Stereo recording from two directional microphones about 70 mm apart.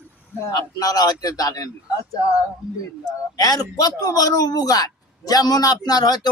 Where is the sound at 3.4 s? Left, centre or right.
Left.